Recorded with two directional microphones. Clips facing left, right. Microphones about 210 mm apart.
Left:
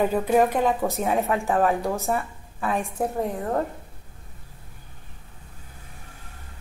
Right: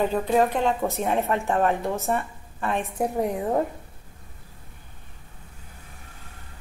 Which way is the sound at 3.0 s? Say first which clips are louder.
Right 1 dB; 15° right (ahead or behind).